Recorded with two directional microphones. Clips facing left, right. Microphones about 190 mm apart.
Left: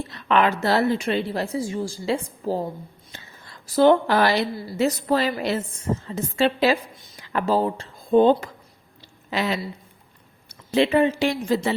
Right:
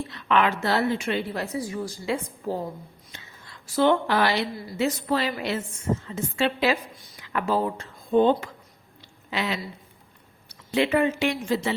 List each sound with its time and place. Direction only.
0.1 s a woman's voice: 40° left (ahead or behind)
3.8 s a woman's voice: 40° left (ahead or behind)
6.9 s speech: 25° left (ahead or behind)
9.0 s a sound: 40° left (ahead or behind)
10.7 s a woman's voice: 30° left (ahead or behind)